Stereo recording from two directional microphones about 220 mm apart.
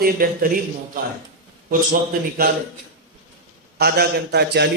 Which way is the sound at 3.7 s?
45° right (ahead or behind).